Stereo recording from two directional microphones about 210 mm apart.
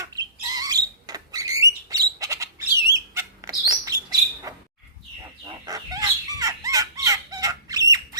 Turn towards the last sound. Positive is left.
turn(degrees=-15)  # may be behind; listen again after turning